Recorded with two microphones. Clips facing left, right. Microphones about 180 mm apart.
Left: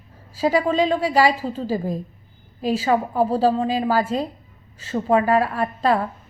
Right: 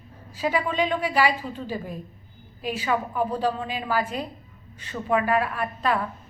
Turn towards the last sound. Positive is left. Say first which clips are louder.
# left 5 dB
turn(degrees=35)  # may be behind; listen again after turning